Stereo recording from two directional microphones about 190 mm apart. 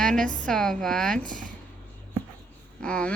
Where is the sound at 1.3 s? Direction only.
45° right (ahead or behind).